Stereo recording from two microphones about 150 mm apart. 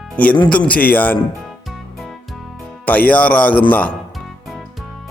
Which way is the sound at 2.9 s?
10° left (ahead or behind).